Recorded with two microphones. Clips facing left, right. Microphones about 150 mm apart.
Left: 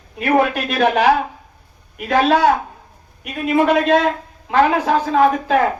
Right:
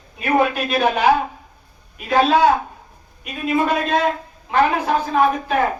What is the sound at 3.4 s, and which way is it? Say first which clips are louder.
Speech: left 4 dB; 85° left.